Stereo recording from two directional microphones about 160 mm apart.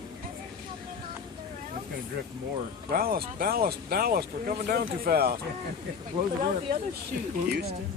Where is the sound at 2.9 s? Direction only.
70° right (ahead or behind).